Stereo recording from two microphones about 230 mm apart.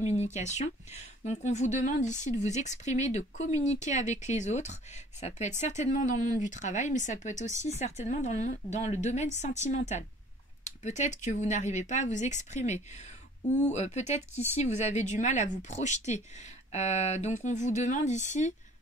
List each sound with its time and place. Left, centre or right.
0.2 s speech: left